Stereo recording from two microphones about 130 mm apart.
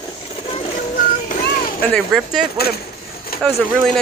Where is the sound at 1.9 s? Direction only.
Centre (ahead or behind).